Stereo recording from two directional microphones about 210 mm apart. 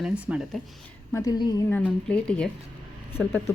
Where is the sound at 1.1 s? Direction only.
15° left (ahead or behind).